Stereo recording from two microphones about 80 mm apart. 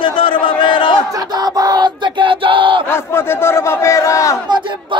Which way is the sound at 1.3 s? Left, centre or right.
Right.